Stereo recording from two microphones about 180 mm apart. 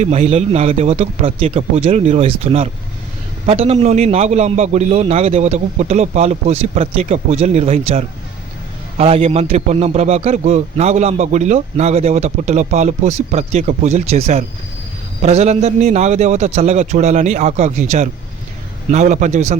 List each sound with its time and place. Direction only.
0.0 s a man's voice: 35° right (ahead or behind)